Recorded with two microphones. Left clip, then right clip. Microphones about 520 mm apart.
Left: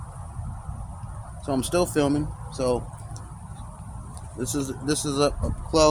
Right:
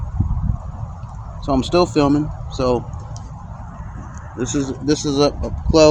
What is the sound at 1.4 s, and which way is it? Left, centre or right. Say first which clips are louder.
Speech: right 8 dB; left.